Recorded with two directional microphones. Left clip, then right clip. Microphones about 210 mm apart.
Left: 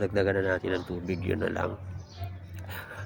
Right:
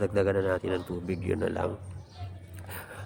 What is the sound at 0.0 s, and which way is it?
Speech, 20° right (ahead or behind).